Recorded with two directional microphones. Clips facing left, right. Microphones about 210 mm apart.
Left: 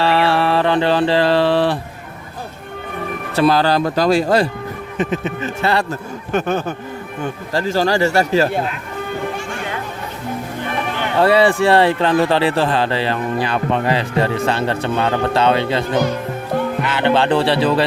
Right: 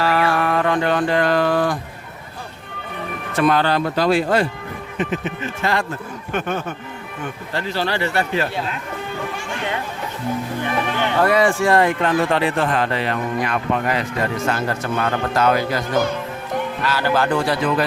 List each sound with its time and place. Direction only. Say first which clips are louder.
0.0 s mantra: left 3 dB; 30° left (ahead or behind)
3.3 s speech: left 3 dB; 35° left (ahead or behind)
11.2 s a man's voice: left 4 dB; 30° left (ahead or behind)